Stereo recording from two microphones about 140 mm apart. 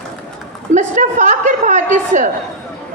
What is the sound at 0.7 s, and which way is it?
A woman's voice, 60° right (ahead or behind).